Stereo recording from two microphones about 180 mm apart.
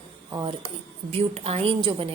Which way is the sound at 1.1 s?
35° right (ahead or behind).